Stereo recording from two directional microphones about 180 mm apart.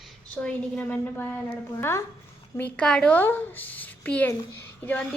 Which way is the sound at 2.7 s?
5° left (ahead or behind).